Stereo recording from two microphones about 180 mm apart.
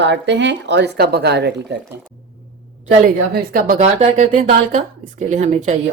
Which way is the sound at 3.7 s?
40° right (ahead or behind).